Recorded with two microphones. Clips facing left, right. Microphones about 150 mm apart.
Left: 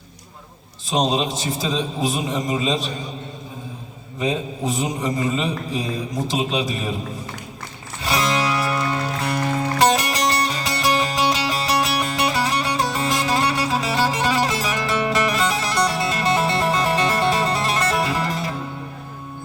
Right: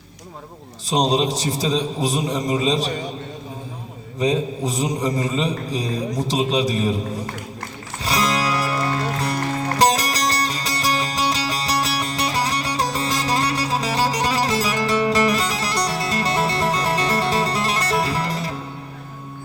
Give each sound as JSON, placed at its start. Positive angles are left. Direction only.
{"t": 0.9, "sound": "a man's voice", "side_deg": -40}
{"t": 4.2, "sound": "a man's voice", "side_deg": -35}
{"t": 8.0, "sound": "music", "side_deg": -35}